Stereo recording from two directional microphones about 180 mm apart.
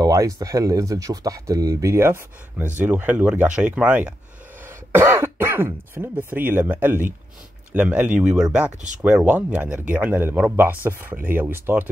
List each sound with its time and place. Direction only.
0.0 s speech: 20° right (ahead or behind)